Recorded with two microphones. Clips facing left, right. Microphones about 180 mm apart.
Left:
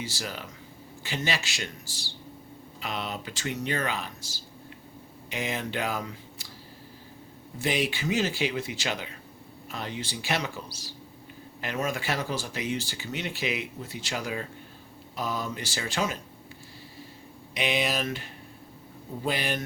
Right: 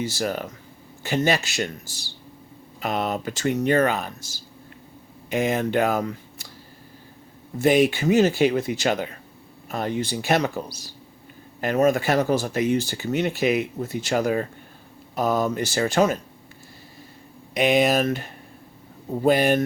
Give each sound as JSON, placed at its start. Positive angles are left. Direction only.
{"t": 0.0, "sound": "speech", "side_deg": -50}
{"t": 7.6, "sound": "speech", "side_deg": -50}
{"t": 11.6, "sound": "speech", "side_deg": -45}
{"t": 17.5, "sound": "speech", "side_deg": -50}